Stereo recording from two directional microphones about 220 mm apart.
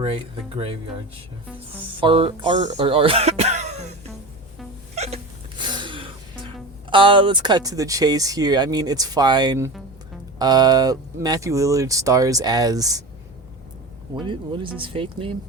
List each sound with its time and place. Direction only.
0.0 s speech: 25° right (ahead or behind)
2.0 s speech: 25° right (ahead or behind)
4.9 s hiccup: 30° right (ahead or behind)
6.9 s speech: 25° right (ahead or behind)
14.2 s speech: 20° right (ahead or behind)